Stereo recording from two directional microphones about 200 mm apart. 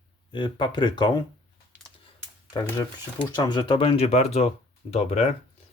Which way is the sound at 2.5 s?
20° left (ahead or behind).